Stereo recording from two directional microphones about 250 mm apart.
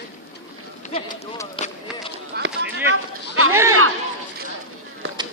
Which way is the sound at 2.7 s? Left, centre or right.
Right.